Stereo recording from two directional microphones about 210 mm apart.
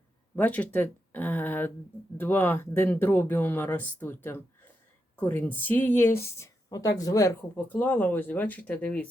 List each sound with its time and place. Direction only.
0.3 s speech: 10° left (ahead or behind)